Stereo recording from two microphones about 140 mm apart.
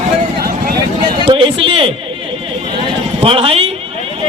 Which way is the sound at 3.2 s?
40° right (ahead or behind).